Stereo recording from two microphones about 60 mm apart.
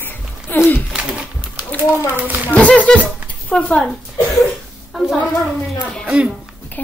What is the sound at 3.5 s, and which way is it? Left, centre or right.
Speech, centre.